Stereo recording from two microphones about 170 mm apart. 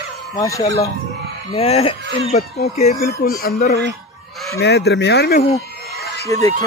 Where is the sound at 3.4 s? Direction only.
60° left (ahead or behind).